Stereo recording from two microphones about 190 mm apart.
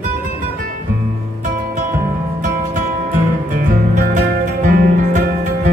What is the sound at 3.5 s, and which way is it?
Music, 45° right (ahead or behind).